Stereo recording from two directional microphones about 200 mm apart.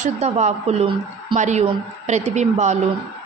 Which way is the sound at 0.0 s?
35° right (ahead or behind).